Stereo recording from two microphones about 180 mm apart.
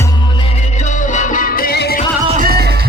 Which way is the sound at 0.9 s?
45° left (ahead or behind).